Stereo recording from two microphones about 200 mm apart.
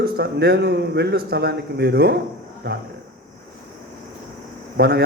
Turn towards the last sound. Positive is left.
turn(degrees=-50)  # may be behind; listen again after turning